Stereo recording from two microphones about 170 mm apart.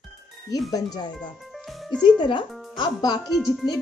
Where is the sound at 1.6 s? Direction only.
Centre (ahead or behind).